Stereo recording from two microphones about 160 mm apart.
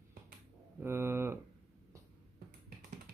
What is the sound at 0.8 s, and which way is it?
Speech, 15° right (ahead or behind).